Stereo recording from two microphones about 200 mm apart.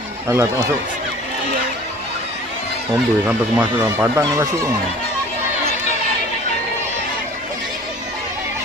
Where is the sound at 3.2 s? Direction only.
10° right (ahead or behind).